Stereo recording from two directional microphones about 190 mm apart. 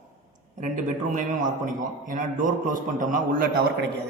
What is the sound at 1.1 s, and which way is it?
A man's voice, 45° right (ahead or behind).